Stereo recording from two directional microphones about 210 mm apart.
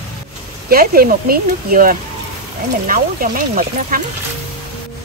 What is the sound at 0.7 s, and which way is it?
Speech, 45° right (ahead or behind).